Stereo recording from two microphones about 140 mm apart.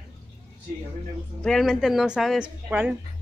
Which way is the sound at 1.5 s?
Centre (ahead or behind).